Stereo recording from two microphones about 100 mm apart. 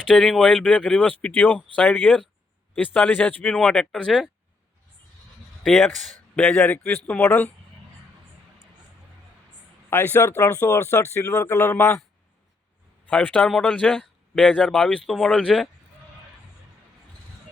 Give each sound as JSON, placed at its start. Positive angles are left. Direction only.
{"t": 0.1, "sound": "speech", "side_deg": 10}
{"t": 5.6, "sound": "speech", "side_deg": 0}
{"t": 6.5, "sound": "speech", "side_deg": 15}
{"t": 9.9, "sound": "speech", "side_deg": 20}
{"t": 13.1, "sound": "speech", "side_deg": 10}